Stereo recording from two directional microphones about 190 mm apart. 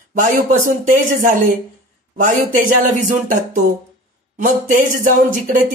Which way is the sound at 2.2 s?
45° right (ahead or behind).